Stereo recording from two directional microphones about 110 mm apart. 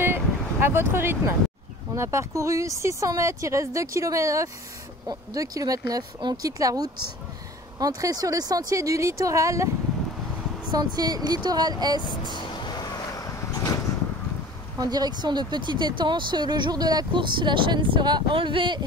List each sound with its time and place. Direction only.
0.0 s vehicle: 20° right (ahead or behind)
2.0 s speech: 25° right (ahead or behind)
10.7 s speech: 35° right (ahead or behind)
12.1 s vehicle: 45° left (ahead or behind)
14.8 s speech: 35° right (ahead or behind)